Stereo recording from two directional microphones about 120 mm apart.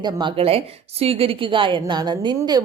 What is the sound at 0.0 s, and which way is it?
A woman's voice, 40° right (ahead or behind).